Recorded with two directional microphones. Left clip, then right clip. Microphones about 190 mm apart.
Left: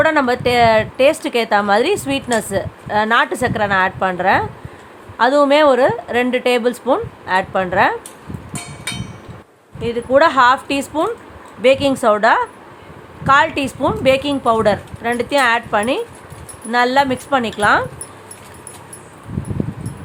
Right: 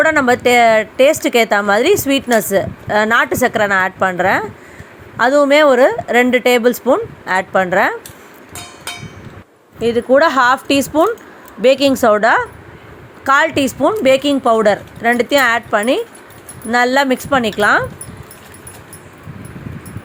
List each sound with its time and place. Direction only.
0.0 s speech: 20° right (ahead or behind)
9.8 s speech: 25° right (ahead or behind)